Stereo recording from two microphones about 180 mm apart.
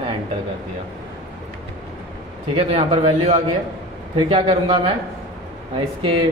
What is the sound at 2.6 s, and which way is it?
A man's voice, 35° right (ahead or behind).